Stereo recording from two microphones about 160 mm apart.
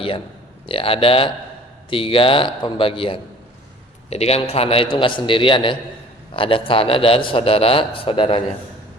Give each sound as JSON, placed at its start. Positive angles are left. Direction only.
{"t": 0.7, "sound": "a man's voice", "side_deg": 35}